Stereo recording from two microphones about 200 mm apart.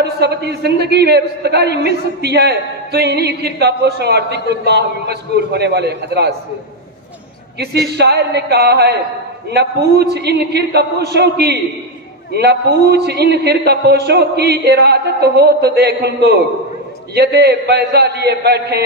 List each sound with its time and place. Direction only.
0.2 s a man's voice: 55° right (ahead or behind)
7.5 s a man's voice: 55° right (ahead or behind)